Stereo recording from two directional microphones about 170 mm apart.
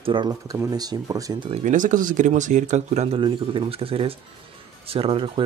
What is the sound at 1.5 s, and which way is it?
Speech, 50° right (ahead or behind).